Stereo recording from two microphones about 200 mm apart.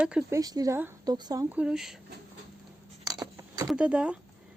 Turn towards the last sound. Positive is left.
turn(degrees=-5)  # may be behind; listen again after turning